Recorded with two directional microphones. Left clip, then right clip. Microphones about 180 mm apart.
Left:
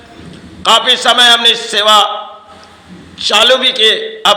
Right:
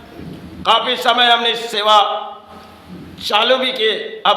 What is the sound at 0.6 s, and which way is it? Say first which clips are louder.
A man's voice: left 5 dB; 10° left (ahead or behind).